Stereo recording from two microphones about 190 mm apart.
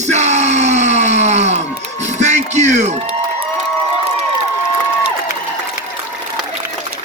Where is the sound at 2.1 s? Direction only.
35° right (ahead or behind).